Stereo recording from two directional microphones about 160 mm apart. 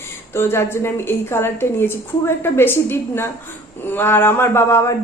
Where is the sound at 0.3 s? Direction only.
15° left (ahead or behind).